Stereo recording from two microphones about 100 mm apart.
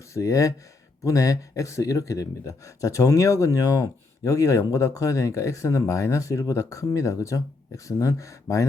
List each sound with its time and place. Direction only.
0.0 s speech: 30° left (ahead or behind)